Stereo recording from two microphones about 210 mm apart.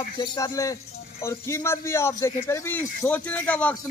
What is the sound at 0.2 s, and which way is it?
Speech, 15° left (ahead or behind).